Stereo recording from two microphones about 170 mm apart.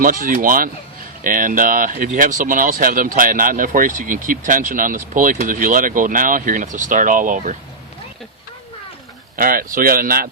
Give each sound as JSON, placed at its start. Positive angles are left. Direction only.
{"t": 0.0, "sound": "speech", "side_deg": -55}
{"t": 9.3, "sound": "speech", "side_deg": -55}